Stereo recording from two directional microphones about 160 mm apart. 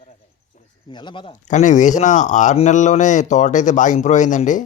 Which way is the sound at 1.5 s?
50° left (ahead or behind).